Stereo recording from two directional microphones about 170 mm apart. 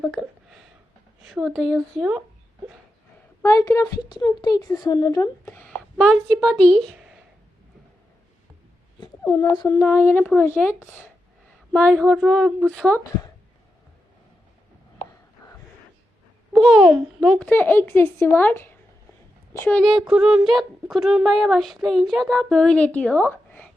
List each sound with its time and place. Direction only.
0.2 s a sound: centre (ahead or behind)
1.2 s speech: centre (ahead or behind)
3.4 s a woman's voice: 20° left (ahead or behind)
5.5 s speech: 5° left (ahead or behind)
9.0 s speech: 25° left (ahead or behind); by 13.0 s 5° left (ahead or behind)
16.5 s a child's voice: 5° right (ahead or behind)
17.5 s speech: 10° left (ahead or behind)
19.8 s speech: centre (ahead or behind)